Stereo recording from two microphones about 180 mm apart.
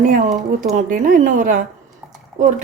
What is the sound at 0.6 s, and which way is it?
Speech, 45° right (ahead or behind).